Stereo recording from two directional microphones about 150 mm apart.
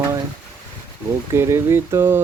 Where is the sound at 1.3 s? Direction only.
15° right (ahead or behind).